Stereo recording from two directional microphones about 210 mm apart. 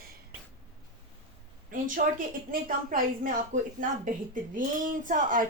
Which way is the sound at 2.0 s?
40° right (ahead or behind).